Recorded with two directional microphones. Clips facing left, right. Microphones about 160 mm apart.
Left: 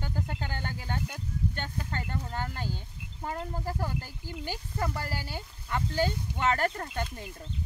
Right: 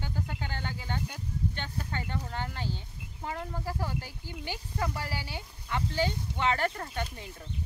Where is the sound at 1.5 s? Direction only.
45° left (ahead or behind).